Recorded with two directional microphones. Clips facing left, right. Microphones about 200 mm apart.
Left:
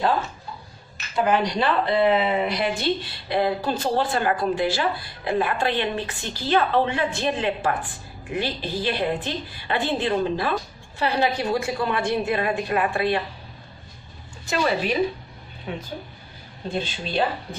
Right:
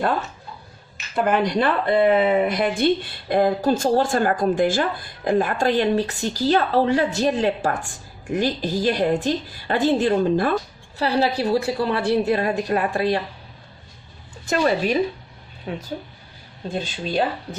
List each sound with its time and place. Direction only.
1.1 s speech: 55° right (ahead or behind)
11.0 s a woman's voice: 35° right (ahead or behind)
14.4 s a woman's voice: 45° right (ahead or behind)